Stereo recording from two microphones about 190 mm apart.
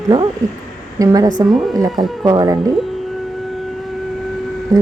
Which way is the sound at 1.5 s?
Centre (ahead or behind).